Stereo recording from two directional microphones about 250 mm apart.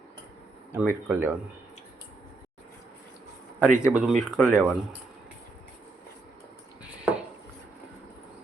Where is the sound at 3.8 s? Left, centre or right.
Centre.